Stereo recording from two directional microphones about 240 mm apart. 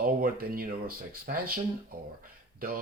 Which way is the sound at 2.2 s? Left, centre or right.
Right.